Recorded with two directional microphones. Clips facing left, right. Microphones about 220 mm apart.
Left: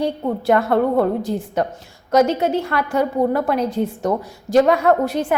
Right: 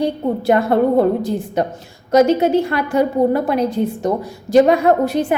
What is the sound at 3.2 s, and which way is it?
Speech, 20° right (ahead or behind).